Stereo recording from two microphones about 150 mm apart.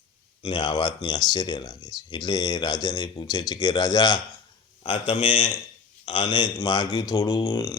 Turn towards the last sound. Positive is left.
turn(degrees=20)  # may be behind; listen again after turning